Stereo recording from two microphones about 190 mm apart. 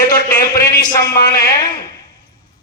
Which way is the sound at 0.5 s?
20° left (ahead or behind).